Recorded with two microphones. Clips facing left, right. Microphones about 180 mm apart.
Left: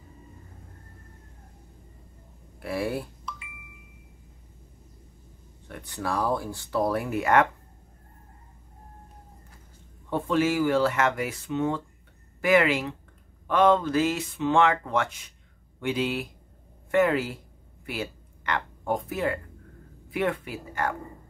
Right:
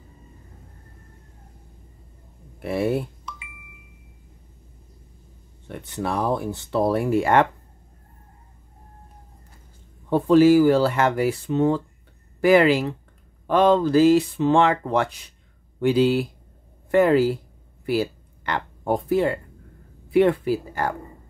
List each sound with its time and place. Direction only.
2.6 s speech: 25° right (ahead or behind)
5.7 s speech: 25° right (ahead or behind)
10.0 s speech: 35° right (ahead or behind)